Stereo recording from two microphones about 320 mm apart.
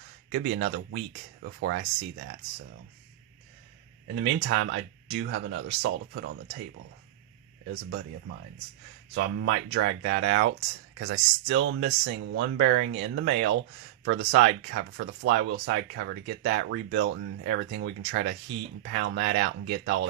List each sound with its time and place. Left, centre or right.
0.3 s speech: right
4.4 s speech: right
7.7 s speech: right
9.1 s speech: right